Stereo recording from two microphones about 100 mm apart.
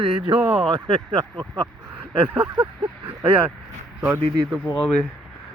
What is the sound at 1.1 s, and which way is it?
Speech, 40° right (ahead or behind).